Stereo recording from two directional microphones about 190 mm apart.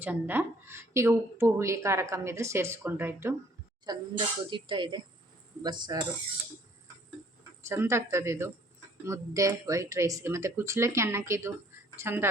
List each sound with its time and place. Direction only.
0.0 s speech: 10° right (ahead or behind)
7.7 s speech: 15° right (ahead or behind)